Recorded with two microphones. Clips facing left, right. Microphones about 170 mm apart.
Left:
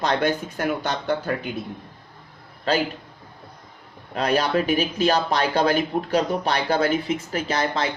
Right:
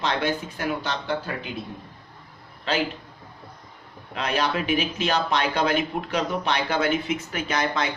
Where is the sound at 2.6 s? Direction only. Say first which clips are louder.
Left 3 dB; 40° left (ahead or behind).